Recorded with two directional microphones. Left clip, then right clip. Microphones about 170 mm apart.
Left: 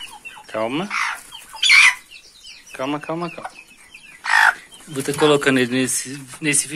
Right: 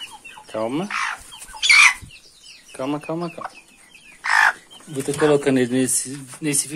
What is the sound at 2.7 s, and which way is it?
Speech, 25° right (ahead or behind).